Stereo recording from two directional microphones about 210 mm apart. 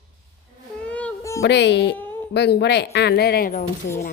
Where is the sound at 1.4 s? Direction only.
55° left (ahead or behind).